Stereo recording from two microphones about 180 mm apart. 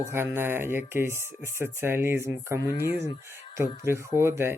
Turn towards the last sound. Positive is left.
turn(degrees=-15)  # may be behind; listen again after turning